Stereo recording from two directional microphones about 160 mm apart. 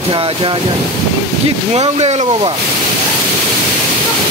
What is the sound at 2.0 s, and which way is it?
Speech, 40° right (ahead or behind).